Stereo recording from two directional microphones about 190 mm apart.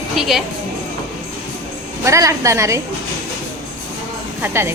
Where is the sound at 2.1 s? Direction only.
15° right (ahead or behind).